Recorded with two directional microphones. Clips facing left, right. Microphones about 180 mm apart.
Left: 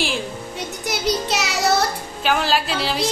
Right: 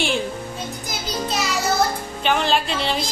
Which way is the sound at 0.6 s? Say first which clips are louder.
Left 3 dB; 75° left (ahead or behind).